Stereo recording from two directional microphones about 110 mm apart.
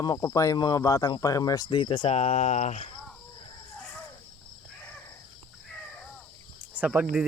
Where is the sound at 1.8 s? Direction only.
50° left (ahead or behind); by 2.9 s 90° left.